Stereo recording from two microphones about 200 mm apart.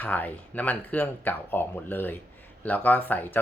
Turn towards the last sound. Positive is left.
turn(degrees=10)  # may be behind; listen again after turning